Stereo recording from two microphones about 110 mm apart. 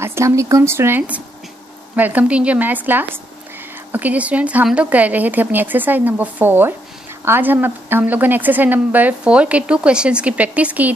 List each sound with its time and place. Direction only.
0.0 s a woman's voice: 25° right (ahead or behind)